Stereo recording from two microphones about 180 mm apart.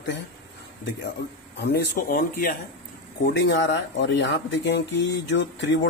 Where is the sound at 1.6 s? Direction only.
60° left (ahead or behind).